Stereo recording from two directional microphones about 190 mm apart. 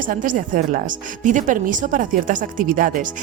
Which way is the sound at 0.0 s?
45° right (ahead or behind).